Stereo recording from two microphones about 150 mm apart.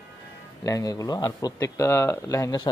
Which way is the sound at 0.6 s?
25° left (ahead or behind).